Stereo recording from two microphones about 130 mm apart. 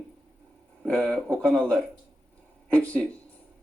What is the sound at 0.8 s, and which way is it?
Speech, 5° left (ahead or behind).